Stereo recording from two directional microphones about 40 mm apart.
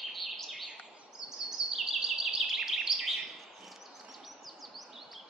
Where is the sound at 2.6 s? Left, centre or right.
Centre.